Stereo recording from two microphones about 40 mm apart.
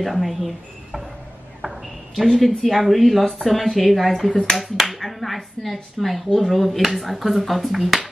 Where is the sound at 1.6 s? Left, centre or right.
Centre.